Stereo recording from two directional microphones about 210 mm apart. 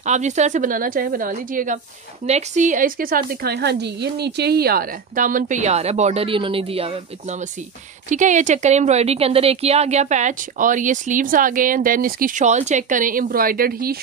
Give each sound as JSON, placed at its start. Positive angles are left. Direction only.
{"t": 0.0, "sound": "speech", "side_deg": -35}